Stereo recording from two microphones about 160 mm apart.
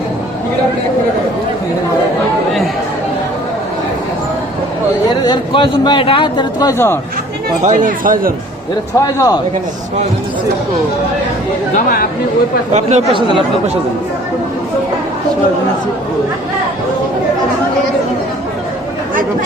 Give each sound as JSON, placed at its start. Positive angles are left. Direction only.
{"t": 5.2, "sound": "a man's voice", "side_deg": 30}
{"t": 7.6, "sound": "speech", "side_deg": -55}
{"t": 9.0, "sound": "a man's voice", "side_deg": 20}
{"t": 12.7, "sound": "speech", "side_deg": -45}